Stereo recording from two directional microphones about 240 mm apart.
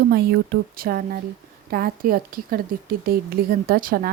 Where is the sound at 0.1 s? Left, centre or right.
Right.